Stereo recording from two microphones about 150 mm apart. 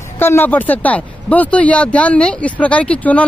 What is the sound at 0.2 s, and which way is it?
Speech, 15° left (ahead or behind).